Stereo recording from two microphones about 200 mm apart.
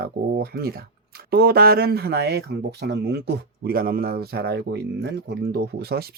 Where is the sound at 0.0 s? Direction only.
50° right (ahead or behind).